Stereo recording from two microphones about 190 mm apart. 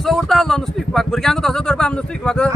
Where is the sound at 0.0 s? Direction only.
Centre (ahead or behind).